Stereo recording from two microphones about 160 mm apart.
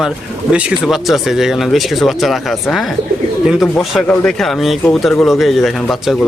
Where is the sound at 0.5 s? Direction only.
5° right (ahead or behind).